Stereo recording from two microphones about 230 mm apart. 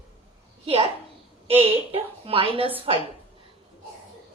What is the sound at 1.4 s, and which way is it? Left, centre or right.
A woman's voice, right.